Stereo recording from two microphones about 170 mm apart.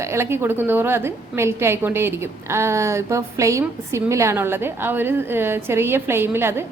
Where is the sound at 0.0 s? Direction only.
15° right (ahead or behind).